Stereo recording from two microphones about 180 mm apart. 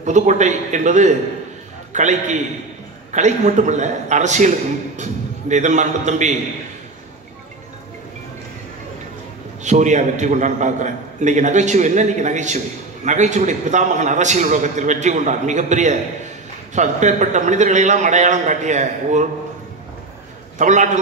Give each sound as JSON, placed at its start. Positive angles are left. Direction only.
{"t": 0.0, "sound": "a man's voice", "side_deg": -40}
{"t": 9.6, "sound": "a man's voice", "side_deg": -40}
{"t": 20.5, "sound": "a man's voice", "side_deg": -40}